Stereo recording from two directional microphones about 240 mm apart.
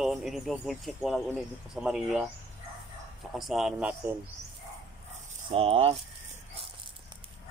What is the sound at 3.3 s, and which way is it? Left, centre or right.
Speech, centre.